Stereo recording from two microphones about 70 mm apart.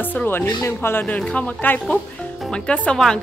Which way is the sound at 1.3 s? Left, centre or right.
Left.